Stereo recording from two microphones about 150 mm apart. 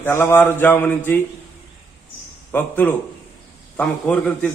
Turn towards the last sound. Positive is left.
turn(degrees=10)  # may be behind; listen again after turning